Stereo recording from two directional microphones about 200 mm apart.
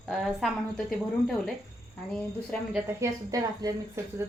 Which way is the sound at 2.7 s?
15° right (ahead or behind).